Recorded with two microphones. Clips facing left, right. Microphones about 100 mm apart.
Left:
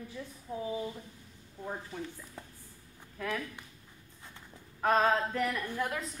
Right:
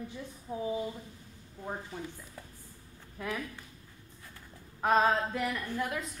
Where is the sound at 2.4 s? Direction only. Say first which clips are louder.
Left 1 dB; 25° left (ahead or behind).